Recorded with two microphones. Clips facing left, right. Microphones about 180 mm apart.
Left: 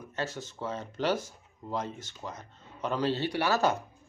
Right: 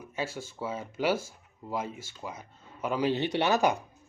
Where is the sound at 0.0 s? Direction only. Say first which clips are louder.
Even; 10° right (ahead or behind).